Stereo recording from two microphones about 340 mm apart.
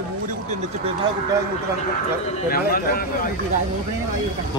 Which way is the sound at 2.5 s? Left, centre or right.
Left.